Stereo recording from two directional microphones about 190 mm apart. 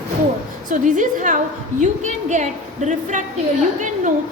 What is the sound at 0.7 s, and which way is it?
A woman's voice, 45° right (ahead or behind).